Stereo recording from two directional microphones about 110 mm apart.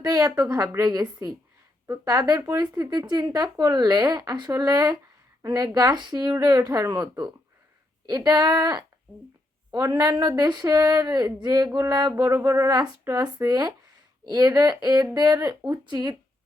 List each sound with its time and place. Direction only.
0.0 s speech: 35° right (ahead or behind)
12.1 s speech: 20° right (ahead or behind); by 16.1 s 40° right (ahead or behind)